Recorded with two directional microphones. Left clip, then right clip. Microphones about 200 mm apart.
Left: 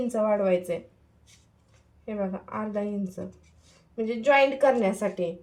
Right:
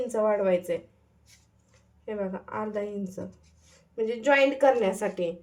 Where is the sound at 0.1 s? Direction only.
30° right (ahead or behind).